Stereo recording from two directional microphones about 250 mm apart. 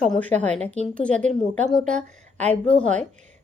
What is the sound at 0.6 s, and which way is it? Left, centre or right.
Speech, right.